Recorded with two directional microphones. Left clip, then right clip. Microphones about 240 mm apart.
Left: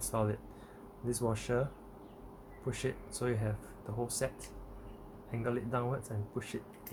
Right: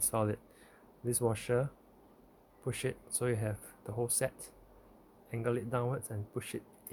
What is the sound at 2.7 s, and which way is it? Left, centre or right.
Speech, right.